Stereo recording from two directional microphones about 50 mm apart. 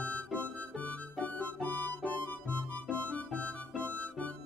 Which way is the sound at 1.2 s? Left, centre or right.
Left.